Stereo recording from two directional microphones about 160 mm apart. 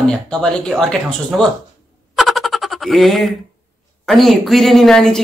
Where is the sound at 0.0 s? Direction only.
5° left (ahead or behind).